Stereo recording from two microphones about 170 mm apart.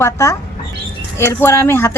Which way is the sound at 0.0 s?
20° left (ahead or behind).